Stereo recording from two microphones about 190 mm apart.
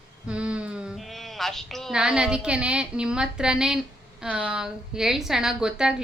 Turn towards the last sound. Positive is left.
turn(degrees=-5)  # may be behind; listen again after turning